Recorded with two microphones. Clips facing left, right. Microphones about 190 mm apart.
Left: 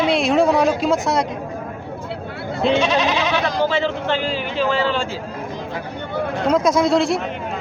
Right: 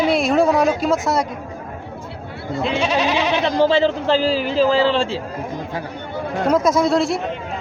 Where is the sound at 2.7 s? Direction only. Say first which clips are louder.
Right 2 dB; 10° right (ahead or behind).